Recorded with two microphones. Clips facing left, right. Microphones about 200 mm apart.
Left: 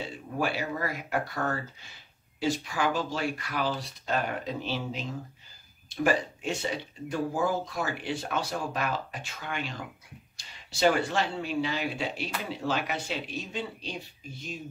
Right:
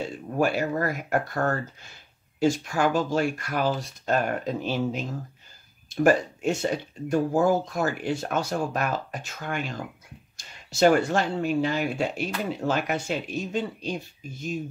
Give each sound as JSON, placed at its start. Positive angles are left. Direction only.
{"t": 0.4, "sound": "speech", "side_deg": -45}